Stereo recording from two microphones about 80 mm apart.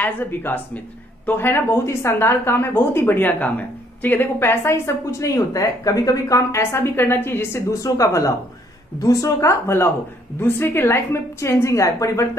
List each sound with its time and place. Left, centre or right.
0.0 s a woman's voice: left
7.8 s a woman's voice: left